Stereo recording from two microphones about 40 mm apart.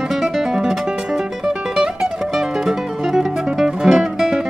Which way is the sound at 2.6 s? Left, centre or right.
Centre.